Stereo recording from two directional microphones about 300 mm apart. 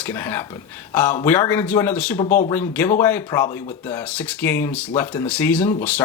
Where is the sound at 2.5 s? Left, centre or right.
Centre.